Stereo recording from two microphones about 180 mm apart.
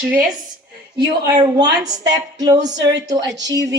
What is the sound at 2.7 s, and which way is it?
Speech, 75° right (ahead or behind).